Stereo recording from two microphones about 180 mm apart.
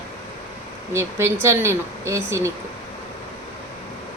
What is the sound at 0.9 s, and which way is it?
A woman's voice, 15° right (ahead or behind).